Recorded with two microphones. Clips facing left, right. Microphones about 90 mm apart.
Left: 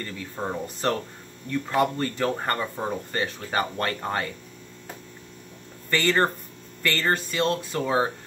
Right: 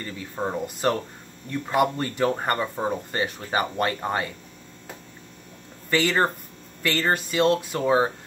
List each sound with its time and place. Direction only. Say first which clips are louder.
0.0 s speech: right 2 dB; 10° right (ahead or behind)
5.9 s speech: even; 10° right (ahead or behind)